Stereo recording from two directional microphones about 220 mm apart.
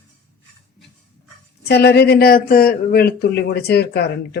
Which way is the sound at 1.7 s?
50° left (ahead or behind).